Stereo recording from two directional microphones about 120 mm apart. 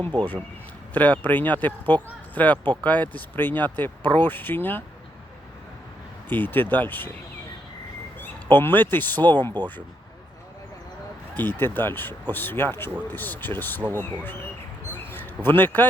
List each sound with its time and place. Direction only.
0.9 s speech: 15° left (ahead or behind)
6.2 s speech: 15° left (ahead or behind)
8.2 s speech: 15° left (ahead or behind)
9.6 s speech: 35° right (ahead or behind)
11.3 s speech: 15° left (ahead or behind)
15.4 s speech: 15° left (ahead or behind)